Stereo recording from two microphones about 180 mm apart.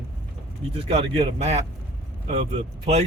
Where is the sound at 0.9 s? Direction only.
35° right (ahead or behind).